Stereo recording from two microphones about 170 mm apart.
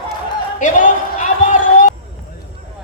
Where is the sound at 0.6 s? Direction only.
50° left (ahead or behind).